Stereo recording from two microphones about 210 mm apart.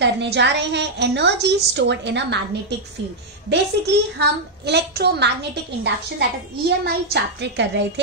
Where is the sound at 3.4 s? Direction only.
55° right (ahead or behind).